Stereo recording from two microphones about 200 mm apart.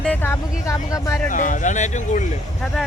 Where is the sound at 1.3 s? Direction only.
40° left (ahead or behind).